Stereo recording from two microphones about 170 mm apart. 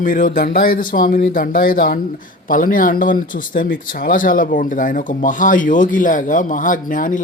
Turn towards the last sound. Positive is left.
turn(degrees=50)  # may be behind; listen again after turning